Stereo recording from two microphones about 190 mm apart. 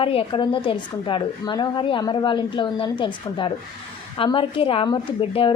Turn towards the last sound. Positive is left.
turn(degrees=30)  # may be behind; listen again after turning